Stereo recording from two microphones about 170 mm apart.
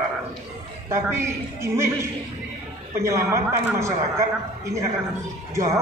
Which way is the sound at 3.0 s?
15° right (ahead or behind).